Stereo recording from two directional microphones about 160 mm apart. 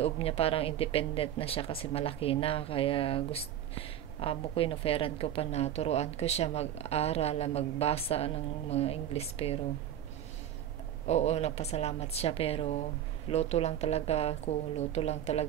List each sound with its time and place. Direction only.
0.0 s a woman's voice: 40° left (ahead or behind)
11.1 s a woman's voice: 45° left (ahead or behind)